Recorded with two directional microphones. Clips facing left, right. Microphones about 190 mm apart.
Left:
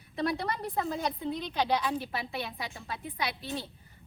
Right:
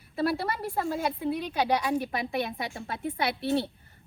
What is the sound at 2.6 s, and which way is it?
A woman's voice, 55° right (ahead or behind).